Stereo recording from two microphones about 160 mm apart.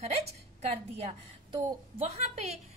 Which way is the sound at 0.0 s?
40° right (ahead or behind).